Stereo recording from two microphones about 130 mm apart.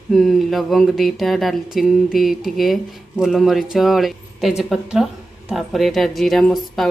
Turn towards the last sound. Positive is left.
turn(degrees=0)  # may be behind; listen again after turning